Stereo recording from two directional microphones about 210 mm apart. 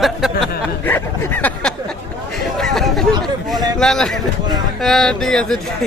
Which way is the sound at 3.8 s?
Centre (ahead or behind).